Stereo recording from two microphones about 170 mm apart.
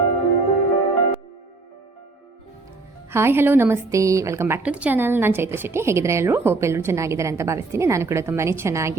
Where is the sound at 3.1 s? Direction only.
15° right (ahead or behind).